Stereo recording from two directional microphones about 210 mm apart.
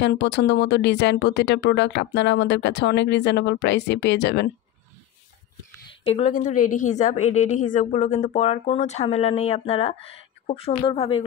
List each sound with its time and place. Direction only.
0.0 s speech: 55° left (ahead or behind)
6.0 s a woman's voice: 30° left (ahead or behind)